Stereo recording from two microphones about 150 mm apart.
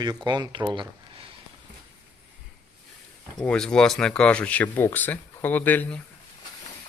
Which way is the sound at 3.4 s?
5° left (ahead or behind).